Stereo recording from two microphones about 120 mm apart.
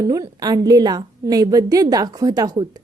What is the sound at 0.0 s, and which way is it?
A woman's voice, 30° right (ahead or behind).